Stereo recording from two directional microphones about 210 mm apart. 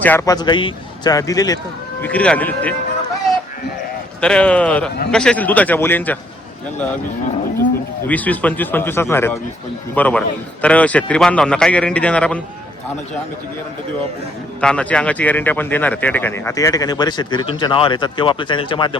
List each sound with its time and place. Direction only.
0.0 s speech: 10° left (ahead or behind)
4.2 s a man's voice: 5° left (ahead or behind)
8.0 s a man's voice: 5° left (ahead or behind)
14.6 s speech: 5° left (ahead or behind); by 18.9 s 25° left (ahead or behind)